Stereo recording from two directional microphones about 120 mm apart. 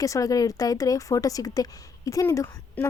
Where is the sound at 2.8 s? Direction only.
15° left (ahead or behind).